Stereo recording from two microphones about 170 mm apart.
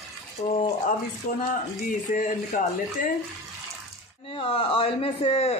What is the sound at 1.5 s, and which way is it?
Speech, 50° left (ahead or behind).